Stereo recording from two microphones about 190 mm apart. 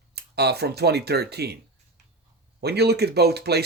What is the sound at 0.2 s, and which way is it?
Speech, 60° right (ahead or behind).